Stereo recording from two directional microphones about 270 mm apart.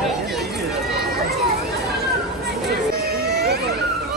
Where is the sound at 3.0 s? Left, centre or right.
Right.